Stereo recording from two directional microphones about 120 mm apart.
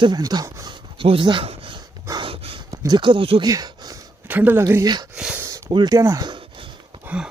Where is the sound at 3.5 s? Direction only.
30° right (ahead or behind).